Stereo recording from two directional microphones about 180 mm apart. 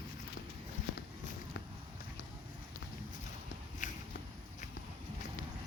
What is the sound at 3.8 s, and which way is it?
Walk, 45° left (ahead or behind).